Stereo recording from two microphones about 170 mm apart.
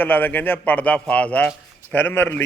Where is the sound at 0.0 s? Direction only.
10° left (ahead or behind).